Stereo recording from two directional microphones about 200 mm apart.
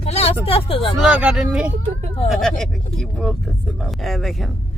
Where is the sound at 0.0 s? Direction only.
30° left (ahead or behind).